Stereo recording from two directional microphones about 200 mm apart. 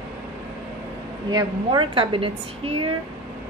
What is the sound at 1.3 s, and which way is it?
A woman's voice, 20° right (ahead or behind).